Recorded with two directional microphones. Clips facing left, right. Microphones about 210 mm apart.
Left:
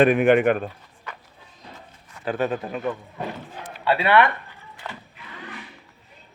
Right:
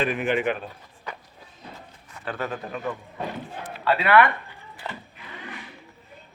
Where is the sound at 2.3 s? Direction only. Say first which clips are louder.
Left 6 dB; 20° left (ahead or behind).